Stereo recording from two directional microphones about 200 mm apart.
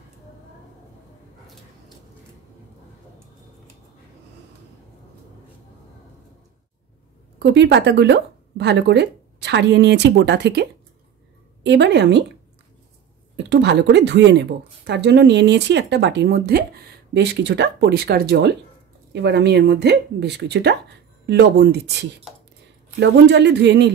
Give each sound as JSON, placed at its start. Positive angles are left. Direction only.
{"t": 7.3, "sound": "a woman's voice", "side_deg": -60}
{"t": 13.4, "sound": "a woman's voice", "side_deg": -60}